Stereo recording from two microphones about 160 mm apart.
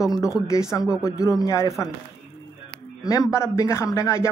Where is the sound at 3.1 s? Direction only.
20° left (ahead or behind).